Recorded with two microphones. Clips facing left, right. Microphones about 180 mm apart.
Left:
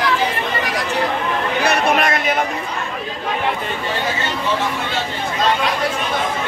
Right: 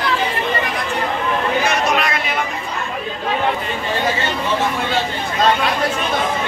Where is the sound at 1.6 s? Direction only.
55° left (ahead or behind).